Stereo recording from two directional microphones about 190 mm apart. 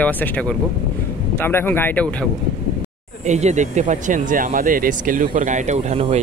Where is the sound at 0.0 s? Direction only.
5° left (ahead or behind).